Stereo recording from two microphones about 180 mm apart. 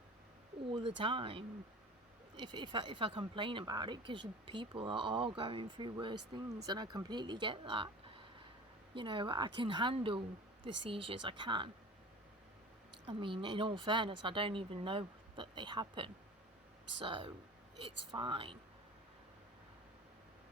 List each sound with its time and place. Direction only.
0.7 s speech: 25° right (ahead or behind)
13.1 s speech: 25° right (ahead or behind)